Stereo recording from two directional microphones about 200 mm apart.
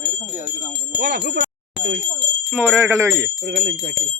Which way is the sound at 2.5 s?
5° right (ahead or behind).